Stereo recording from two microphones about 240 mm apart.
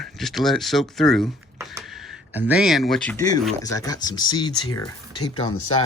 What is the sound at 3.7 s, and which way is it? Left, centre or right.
Speech, centre.